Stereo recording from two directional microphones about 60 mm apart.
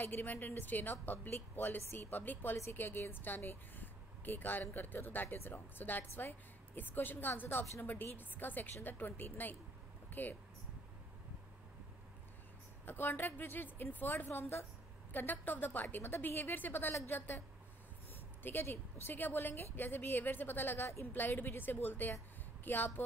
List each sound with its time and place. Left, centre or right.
0.0 s speech: left
10.0 s a sound: left
12.8 s speech: left
18.4 s speech: left
21.1 s speech: left